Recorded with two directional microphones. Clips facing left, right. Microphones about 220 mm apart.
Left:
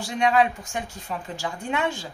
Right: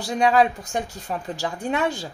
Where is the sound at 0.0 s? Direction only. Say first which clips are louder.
Right 2 dB; 35° right (ahead or behind).